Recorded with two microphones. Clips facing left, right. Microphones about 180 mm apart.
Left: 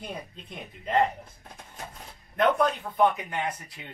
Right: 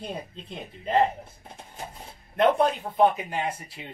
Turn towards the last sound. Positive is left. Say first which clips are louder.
# right 2 dB
turn(degrees=-30)  # may be behind; listen again after turning